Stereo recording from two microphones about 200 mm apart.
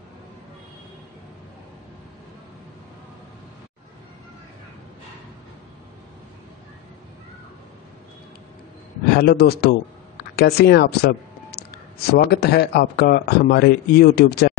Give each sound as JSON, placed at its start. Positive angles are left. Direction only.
{"t": 9.1, "sound": "speech", "side_deg": 50}